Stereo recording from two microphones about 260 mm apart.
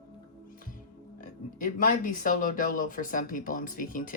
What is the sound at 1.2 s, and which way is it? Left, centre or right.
Speech, left.